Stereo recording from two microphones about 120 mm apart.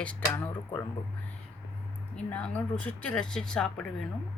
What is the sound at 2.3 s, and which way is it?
Speech, 10° left (ahead or behind).